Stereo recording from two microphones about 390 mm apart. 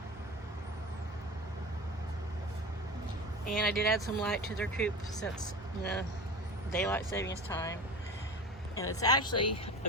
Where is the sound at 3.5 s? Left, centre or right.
Centre.